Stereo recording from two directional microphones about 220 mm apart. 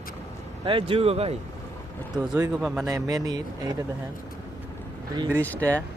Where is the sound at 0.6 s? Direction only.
25° right (ahead or behind).